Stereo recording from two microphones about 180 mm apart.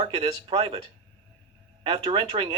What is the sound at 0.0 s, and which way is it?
Speech, 35° right (ahead or behind).